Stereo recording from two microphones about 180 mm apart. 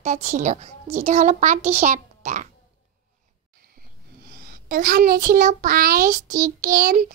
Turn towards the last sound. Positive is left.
turn(degrees=-45)  # may be behind; listen again after turning